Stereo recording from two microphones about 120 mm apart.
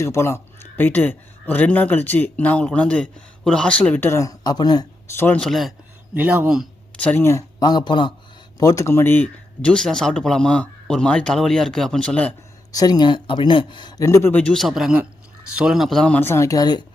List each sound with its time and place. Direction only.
0.0 s speech: 25° left (ahead or behind)
5.1 s speech: 15° left (ahead or behind)
5.4 s speech: centre (ahead or behind)
6.1 s speech: 15° right (ahead or behind)
6.9 s speech: 10° left (ahead or behind)
7.6 s speech: 35° left (ahead or behind)
8.5 s speech: 30° left (ahead or behind); by 12.3 s 10° left (ahead or behind)
12.7 s speech: 35° left (ahead or behind)
14.0 s speech: 25° left (ahead or behind); by 16.1 s 5° left (ahead or behind)
16.1 s speech: 20° left (ahead or behind)